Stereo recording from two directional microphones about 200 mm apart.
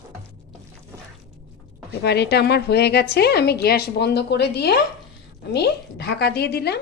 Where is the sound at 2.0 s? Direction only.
55° left (ahead or behind).